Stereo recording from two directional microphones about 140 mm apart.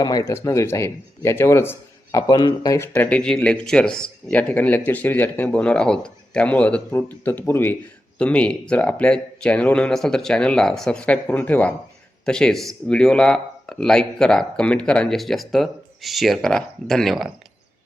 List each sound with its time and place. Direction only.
0.0 s speech: 25° left (ahead or behind)
2.1 s speech: 30° left (ahead or behind)
2.7 s speech: 15° left (ahead or behind); by 17.3 s centre (ahead or behind)